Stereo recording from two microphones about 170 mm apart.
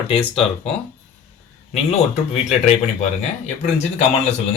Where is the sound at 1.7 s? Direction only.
40° left (ahead or behind).